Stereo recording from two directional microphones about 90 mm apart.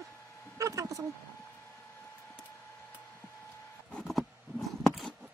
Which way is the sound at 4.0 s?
Centre (ahead or behind).